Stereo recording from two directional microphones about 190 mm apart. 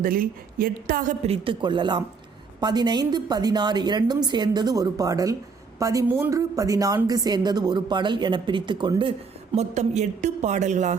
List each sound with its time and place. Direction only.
0.0 s a woman's voice: 50° right (ahead or behind); by 9.1 s 25° right (ahead or behind)
9.6 s a woman's voice: 35° right (ahead or behind)